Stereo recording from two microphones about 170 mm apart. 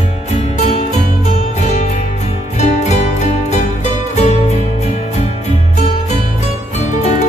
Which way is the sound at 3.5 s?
40° left (ahead or behind).